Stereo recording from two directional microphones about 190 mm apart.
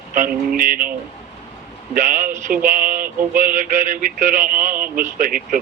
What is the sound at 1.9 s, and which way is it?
Male singing, 45° right (ahead or behind).